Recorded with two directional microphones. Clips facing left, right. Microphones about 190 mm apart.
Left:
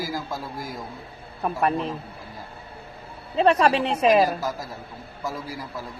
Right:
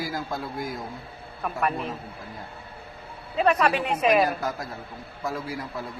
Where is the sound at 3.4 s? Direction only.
30° left (ahead or behind).